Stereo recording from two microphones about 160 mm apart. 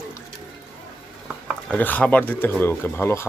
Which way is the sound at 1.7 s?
10° left (ahead or behind).